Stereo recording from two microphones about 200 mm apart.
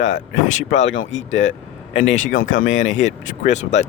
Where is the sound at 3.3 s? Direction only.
35° left (ahead or behind).